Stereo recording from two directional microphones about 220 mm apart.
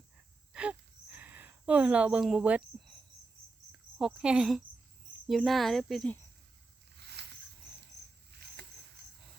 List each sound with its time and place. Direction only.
0.5 s gasp: 5° right (ahead or behind)
3.7 s insect: 5° right (ahead or behind)
5.2 s speech: centre (ahead or behind)
7.2 s a sound: 50° right (ahead or behind)